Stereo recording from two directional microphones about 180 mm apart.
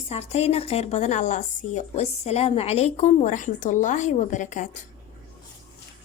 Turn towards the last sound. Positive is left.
turn(degrees=45)  # may be behind; listen again after turning